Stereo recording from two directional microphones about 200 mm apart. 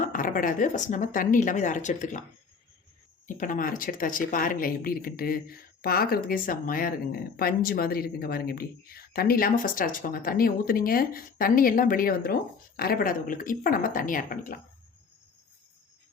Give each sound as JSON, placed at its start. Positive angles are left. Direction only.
{"t": 0.0, "sound": "speech", "side_deg": 40}
{"t": 3.2, "sound": "speech", "side_deg": 40}